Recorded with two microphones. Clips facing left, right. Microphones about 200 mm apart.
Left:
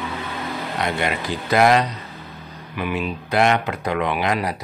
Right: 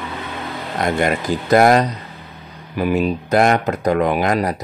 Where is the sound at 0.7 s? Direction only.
45° right (ahead or behind).